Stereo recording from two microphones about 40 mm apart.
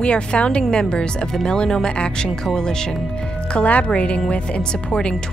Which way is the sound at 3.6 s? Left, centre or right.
Left.